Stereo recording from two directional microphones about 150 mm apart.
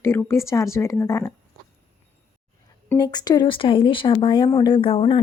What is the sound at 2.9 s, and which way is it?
A woman's voice, 25° left (ahead or behind).